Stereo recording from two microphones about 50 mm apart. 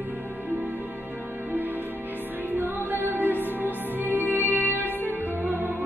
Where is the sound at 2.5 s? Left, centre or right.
Right.